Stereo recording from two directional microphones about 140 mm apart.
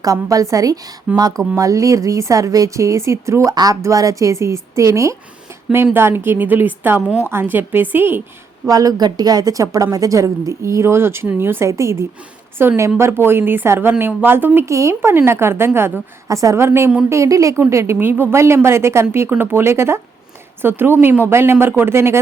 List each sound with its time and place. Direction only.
0.0 s a woman's voice: 25° right (ahead or behind)
8.6 s a woman's voice: 25° right (ahead or behind)